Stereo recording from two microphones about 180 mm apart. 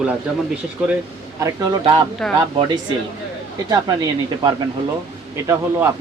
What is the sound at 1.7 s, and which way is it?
Speech, 25° right (ahead or behind).